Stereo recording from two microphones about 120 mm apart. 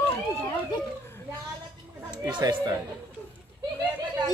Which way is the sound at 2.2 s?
40° right (ahead or behind).